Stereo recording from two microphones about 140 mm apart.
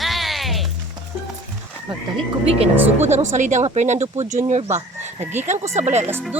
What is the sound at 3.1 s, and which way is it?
Speech, 60° right (ahead or behind).